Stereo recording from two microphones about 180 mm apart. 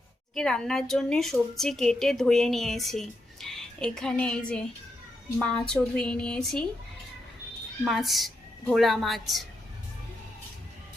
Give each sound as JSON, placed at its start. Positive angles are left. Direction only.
{"t": 0.3, "sound": "a woman's voice", "side_deg": 5}
{"t": 7.9, "sound": "a woman's voice", "side_deg": 0}